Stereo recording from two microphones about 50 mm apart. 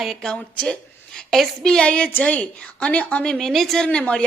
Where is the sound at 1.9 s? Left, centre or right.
Left.